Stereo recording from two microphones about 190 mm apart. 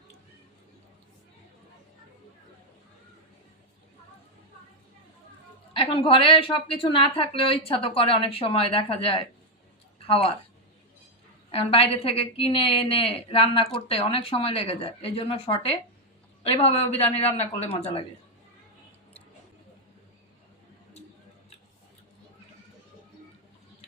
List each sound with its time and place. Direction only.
5.7 s a woman's voice: 30° left (ahead or behind)
11.5 s a woman's voice: 30° left (ahead or behind)